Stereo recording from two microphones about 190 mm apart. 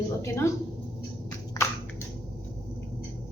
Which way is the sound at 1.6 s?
20° left (ahead or behind).